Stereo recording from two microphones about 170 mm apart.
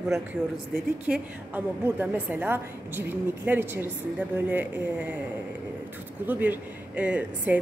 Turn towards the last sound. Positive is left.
turn(degrees=-10)  # may be behind; listen again after turning